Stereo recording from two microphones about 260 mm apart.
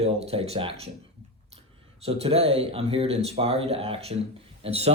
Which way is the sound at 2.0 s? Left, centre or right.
Right.